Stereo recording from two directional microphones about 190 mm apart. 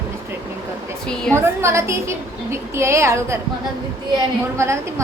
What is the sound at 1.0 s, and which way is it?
Speech, 5° left (ahead or behind).